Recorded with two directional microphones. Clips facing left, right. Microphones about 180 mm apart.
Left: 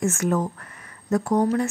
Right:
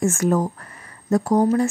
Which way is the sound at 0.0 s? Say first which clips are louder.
Right 3 dB; 35° right (ahead or behind).